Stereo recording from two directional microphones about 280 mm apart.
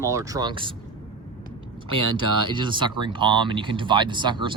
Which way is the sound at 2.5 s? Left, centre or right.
Centre.